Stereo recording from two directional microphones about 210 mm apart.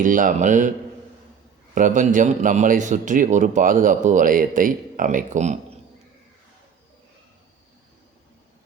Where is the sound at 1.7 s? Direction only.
35° right (ahead or behind).